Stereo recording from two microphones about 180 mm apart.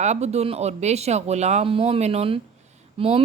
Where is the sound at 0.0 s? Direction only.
40° right (ahead or behind).